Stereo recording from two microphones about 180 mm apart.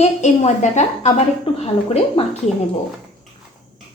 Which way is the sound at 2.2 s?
30° left (ahead or behind).